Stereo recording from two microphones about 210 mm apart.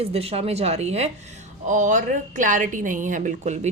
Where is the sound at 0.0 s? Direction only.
30° right (ahead or behind).